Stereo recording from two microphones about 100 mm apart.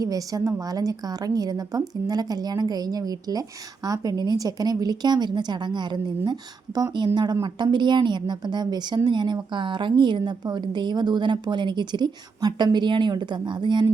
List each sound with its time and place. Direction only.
0.0 s a woman's voice: 35° right (ahead or behind)